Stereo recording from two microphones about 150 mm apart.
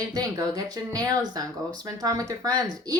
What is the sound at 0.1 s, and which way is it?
Speech, 25° right (ahead or behind).